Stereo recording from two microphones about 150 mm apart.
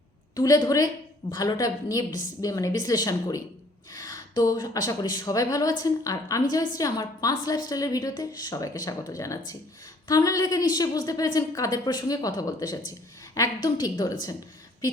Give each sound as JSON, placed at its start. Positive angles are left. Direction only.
{"t": 0.3, "sound": "a woman's voice", "side_deg": 25}